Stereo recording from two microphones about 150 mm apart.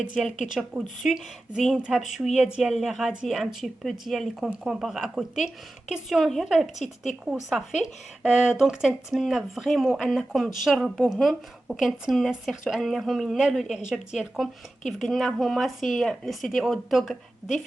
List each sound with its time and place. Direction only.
0.2 s speech: centre (ahead or behind)